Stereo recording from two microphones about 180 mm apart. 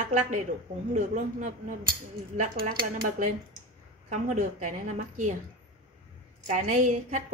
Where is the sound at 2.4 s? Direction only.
55° right (ahead or behind).